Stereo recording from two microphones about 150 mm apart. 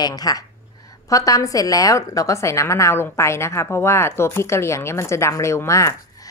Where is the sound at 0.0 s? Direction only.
25° left (ahead or behind).